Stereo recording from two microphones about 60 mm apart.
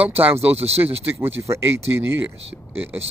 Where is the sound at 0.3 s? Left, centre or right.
Right.